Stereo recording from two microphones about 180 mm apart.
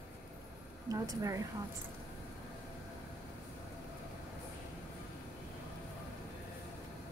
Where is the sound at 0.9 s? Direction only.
20° right (ahead or behind).